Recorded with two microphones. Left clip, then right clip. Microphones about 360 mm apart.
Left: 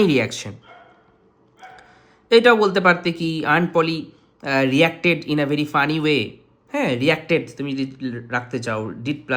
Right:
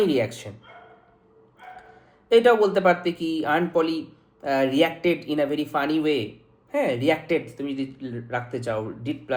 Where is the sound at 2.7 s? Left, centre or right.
Left.